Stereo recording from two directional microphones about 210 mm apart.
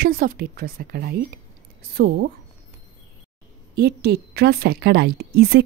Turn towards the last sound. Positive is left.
turn(degrees=-50)  # may be behind; listen again after turning